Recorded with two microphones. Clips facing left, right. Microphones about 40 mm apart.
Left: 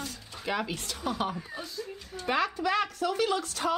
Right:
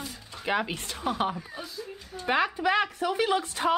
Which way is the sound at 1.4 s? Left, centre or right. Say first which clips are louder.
Even; centre.